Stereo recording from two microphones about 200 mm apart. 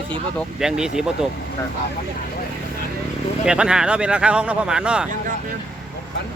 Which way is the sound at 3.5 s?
5° right (ahead or behind).